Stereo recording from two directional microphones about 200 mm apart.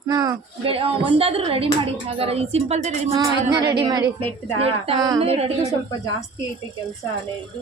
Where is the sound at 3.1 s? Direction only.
20° right (ahead or behind).